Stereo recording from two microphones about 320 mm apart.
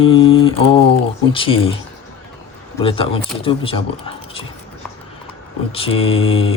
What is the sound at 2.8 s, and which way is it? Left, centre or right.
Speech, centre.